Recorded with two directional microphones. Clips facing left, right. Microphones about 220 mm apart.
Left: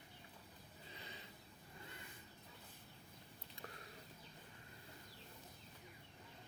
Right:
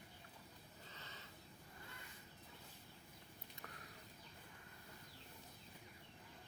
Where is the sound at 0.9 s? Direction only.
15° left (ahead or behind).